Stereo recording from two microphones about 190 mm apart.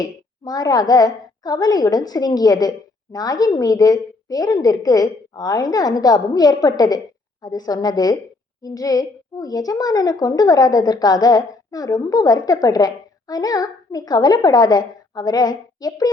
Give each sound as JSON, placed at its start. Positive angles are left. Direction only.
{"t": 0.0, "sound": "a child's voice", "side_deg": 20}